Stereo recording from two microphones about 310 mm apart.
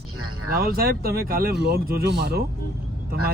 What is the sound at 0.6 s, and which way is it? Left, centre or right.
Speech, right.